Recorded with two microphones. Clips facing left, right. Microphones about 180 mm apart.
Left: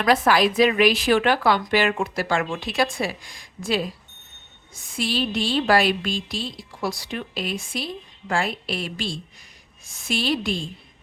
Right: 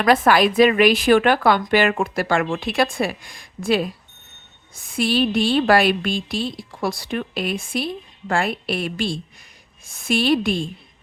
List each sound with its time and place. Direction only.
0.0 s speech: 55° right (ahead or behind)